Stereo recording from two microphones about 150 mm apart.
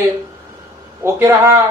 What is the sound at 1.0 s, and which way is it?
Speech, 20° right (ahead or behind).